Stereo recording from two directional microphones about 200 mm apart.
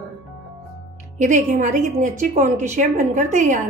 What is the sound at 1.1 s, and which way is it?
A woman's voice, 40° right (ahead or behind).